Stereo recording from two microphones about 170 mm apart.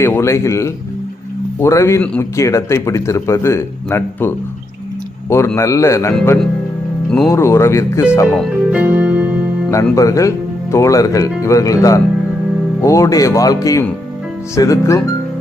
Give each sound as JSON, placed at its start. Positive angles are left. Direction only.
{"t": 0.0, "sound": "a man's voice", "side_deg": 15}
{"t": 5.5, "sound": "a man's voice", "side_deg": 15}
{"t": 7.3, "sound": "a man's voice", "side_deg": 15}
{"t": 8.3, "sound": "speech", "side_deg": 5}
{"t": 8.7, "sound": "keyboard", "side_deg": -10}
{"t": 9.6, "sound": "a man's voice", "side_deg": 15}